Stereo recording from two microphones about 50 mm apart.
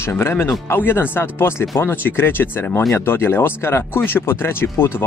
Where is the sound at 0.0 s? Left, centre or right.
Left.